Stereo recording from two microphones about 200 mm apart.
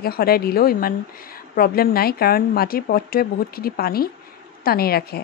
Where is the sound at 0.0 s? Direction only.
50° left (ahead or behind).